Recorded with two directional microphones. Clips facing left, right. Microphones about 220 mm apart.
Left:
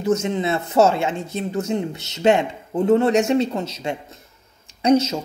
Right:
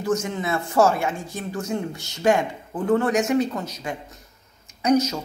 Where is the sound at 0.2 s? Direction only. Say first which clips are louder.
Left 4 dB; 25° left (ahead or behind).